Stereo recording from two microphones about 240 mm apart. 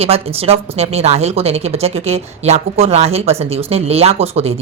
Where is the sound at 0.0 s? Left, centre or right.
Right.